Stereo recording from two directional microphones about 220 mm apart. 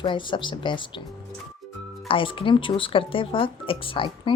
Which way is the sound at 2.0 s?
25° left (ahead or behind).